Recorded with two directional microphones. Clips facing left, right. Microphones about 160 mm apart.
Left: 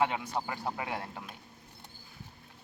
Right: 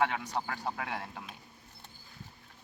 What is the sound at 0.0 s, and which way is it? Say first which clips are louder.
Speech: left 1 dB; 10° left (ahead or behind).